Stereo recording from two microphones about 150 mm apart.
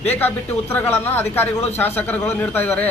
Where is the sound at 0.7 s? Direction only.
15° left (ahead or behind).